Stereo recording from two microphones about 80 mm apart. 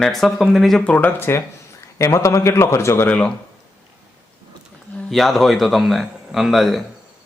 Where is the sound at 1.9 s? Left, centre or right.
Left.